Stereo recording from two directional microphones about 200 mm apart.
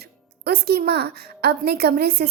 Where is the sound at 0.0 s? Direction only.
50° right (ahead or behind).